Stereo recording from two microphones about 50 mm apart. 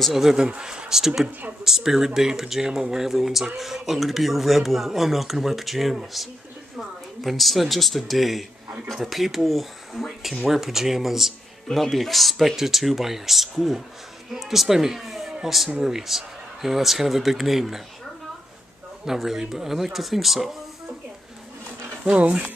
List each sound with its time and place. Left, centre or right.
0.0 s speech: centre
7.2 s speech: centre
19.0 s speech: centre
22.0 s speech: right